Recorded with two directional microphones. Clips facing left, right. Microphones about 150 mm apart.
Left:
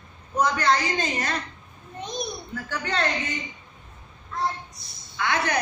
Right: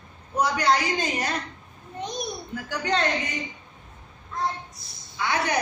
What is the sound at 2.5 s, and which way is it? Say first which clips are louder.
Speech: right 5 dB; 15° right (ahead or behind).